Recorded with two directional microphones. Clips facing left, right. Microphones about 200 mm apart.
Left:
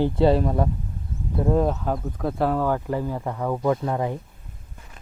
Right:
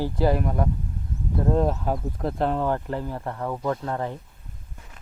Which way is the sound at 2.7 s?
10° left (ahead or behind).